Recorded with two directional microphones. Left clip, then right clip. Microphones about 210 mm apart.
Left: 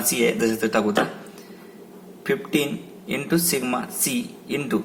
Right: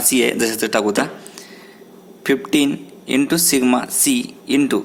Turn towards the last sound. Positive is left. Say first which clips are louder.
# right 8 dB
turn(degrees=-45)  # may be behind; listen again after turning